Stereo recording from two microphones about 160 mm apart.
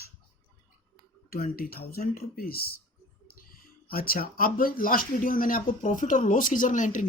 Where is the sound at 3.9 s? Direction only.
65° left (ahead or behind).